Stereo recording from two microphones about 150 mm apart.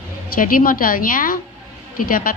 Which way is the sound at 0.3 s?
70° left (ahead or behind).